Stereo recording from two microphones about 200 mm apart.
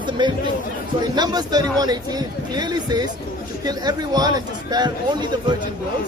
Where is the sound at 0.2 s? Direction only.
25° right (ahead or behind).